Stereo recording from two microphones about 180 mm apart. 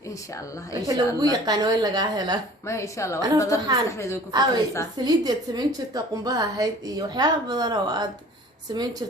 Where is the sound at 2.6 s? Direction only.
15° left (ahead or behind).